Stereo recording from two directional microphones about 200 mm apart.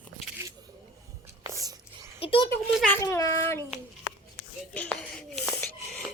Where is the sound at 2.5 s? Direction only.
10° left (ahead or behind).